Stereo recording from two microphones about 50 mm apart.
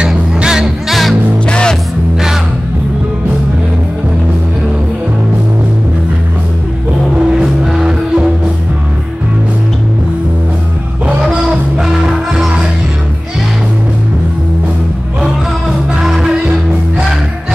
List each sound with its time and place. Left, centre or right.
0.0 s music: centre
0.8 s music: centre
1.5 s music: centre
7.2 s music: centre
12.3 s music: centre
16.0 s music: centre